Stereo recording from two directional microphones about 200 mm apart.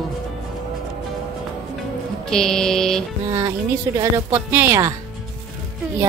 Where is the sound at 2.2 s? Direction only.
5° left (ahead or behind).